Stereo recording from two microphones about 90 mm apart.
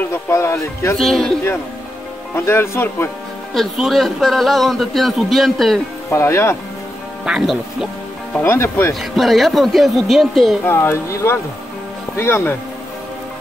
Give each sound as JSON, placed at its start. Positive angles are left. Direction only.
{"t": 0.1, "sound": "music", "side_deg": 30}
{"t": 0.9, "sound": "a man's voice", "side_deg": 5}
{"t": 2.3, "sound": "speech", "side_deg": 30}
{"t": 3.5, "sound": "a man's voice", "side_deg": 0}
{"t": 6.0, "sound": "speech", "side_deg": 30}
{"t": 7.2, "sound": "a man's voice", "side_deg": -5}
{"t": 8.4, "sound": "speech", "side_deg": 25}
{"t": 9.1, "sound": "a man's voice", "side_deg": 0}
{"t": 10.6, "sound": "speech", "side_deg": 25}